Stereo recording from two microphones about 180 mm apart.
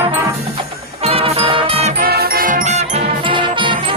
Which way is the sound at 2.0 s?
55° right (ahead or behind).